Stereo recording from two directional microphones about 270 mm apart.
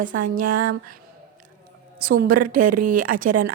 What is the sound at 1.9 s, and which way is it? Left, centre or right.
A woman's voice, right.